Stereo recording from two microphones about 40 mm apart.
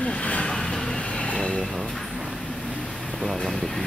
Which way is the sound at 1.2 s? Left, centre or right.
Left.